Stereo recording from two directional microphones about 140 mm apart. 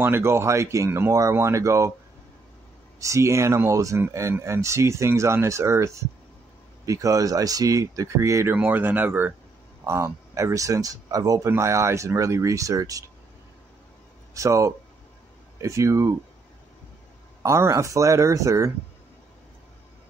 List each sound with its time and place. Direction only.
0.0 s speech: 15° right (ahead or behind)
3.0 s speech: 20° right (ahead or behind)
14.3 s speech: 20° right (ahead or behind)
17.4 s speech: 25° right (ahead or behind)